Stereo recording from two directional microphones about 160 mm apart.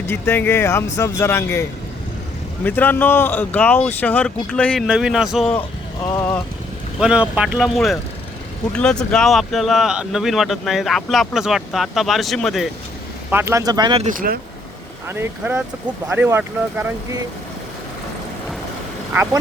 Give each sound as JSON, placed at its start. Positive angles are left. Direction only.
{"t": 0.1, "sound": "speech", "side_deg": 15}
{"t": 2.6, "sound": "speech", "side_deg": 10}
{"t": 6.1, "sound": "speech", "side_deg": 20}
{"t": 7.0, "sound": "speech", "side_deg": -5}
{"t": 13.3, "sound": "speech", "side_deg": -15}
{"t": 14.0, "sound": "speech", "side_deg": -55}
{"t": 15.0, "sound": "speech", "side_deg": -15}
{"t": 19.1, "sound": "speech", "side_deg": -15}